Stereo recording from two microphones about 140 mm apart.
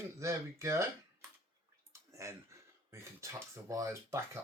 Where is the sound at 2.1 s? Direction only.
20° right (ahead or behind).